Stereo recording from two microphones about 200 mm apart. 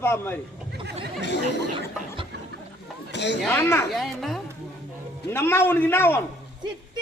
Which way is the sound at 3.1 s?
60° left (ahead or behind).